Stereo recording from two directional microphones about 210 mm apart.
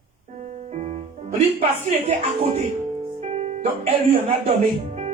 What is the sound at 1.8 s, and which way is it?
Speech, 30° right (ahead or behind).